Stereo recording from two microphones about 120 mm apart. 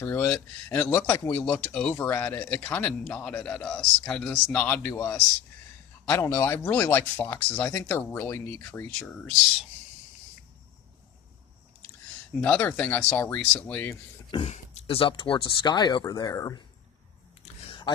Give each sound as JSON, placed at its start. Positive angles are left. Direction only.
{"t": 0.0, "sound": "a man's voice", "side_deg": 15}
{"t": 9.0, "sound": "speech", "side_deg": 5}
{"t": 12.4, "sound": "a man's voice", "side_deg": 10}
{"t": 14.4, "sound": "speech", "side_deg": 65}